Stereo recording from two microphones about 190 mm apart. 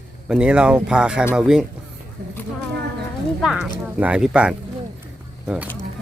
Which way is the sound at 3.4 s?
5° right (ahead or behind).